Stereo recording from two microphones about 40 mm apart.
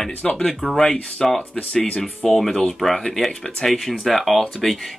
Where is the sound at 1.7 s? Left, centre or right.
Left.